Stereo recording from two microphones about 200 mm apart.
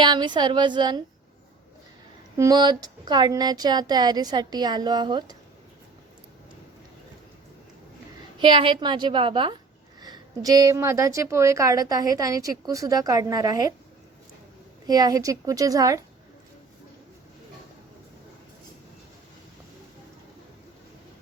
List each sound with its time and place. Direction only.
0.0 s speech: 25° right (ahead or behind)
2.3 s speech: 20° right (ahead or behind)
8.4 s a woman's voice: 25° right (ahead or behind)
14.8 s a woman's voice: 20° right (ahead or behind)